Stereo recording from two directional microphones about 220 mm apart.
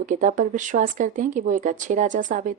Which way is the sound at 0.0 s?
35° right (ahead or behind).